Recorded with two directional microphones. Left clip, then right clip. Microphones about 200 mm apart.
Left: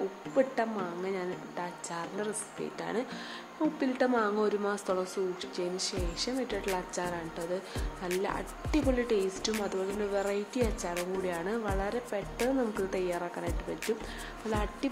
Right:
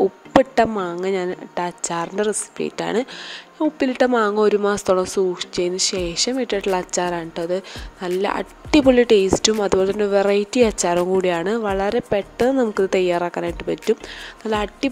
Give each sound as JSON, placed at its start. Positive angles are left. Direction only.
{"t": 0.4, "sound": "speech", "side_deg": -45}